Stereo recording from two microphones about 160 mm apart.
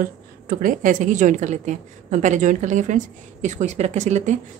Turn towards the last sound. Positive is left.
turn(degrees=-50)  # may be behind; listen again after turning